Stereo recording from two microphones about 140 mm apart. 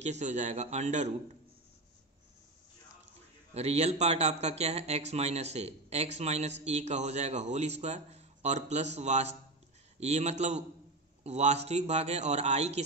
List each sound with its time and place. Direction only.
0.0 s a man's voice: 55° right (ahead or behind)
3.5 s speech: 50° right (ahead or behind)